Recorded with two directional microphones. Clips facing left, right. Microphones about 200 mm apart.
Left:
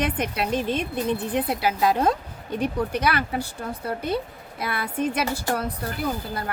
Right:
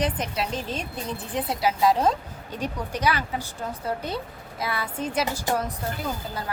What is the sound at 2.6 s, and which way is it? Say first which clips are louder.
Speech: left 3 dB; 60° left (ahead or behind).